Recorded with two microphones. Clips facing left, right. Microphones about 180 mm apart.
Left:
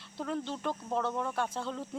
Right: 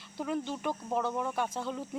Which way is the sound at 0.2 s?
10° right (ahead or behind).